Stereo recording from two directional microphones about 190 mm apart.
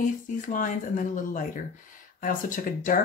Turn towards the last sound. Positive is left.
turn(degrees=45)  # may be behind; listen again after turning